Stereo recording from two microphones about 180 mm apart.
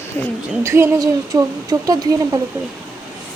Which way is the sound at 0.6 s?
15° right (ahead or behind).